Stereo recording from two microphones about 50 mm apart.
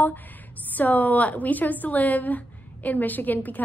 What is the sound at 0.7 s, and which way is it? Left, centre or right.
A woman's voice, left.